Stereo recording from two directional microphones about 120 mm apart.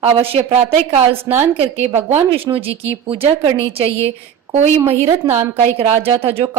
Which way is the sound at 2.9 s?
55° right (ahead or behind).